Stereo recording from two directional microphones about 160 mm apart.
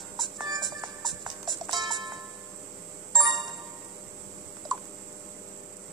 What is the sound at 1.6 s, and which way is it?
Music, 25° right (ahead or behind).